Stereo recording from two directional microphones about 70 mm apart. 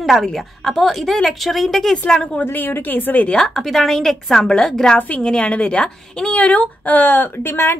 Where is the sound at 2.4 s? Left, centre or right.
Left.